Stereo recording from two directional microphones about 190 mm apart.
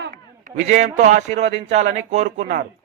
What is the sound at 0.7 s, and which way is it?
A man's voice, 40° right (ahead or behind).